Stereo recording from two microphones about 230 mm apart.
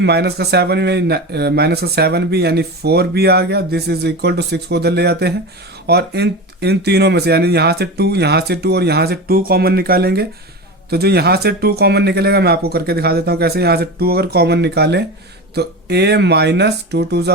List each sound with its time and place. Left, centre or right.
0.0 s speech: right